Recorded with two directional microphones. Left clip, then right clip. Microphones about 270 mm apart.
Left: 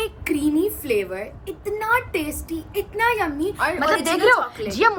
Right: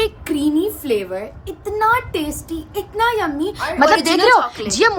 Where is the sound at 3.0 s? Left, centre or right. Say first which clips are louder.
Right 3 dB; centre.